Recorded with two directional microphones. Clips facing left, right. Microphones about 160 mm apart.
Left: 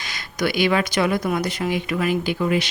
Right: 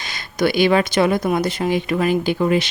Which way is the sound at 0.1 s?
30° right (ahead or behind).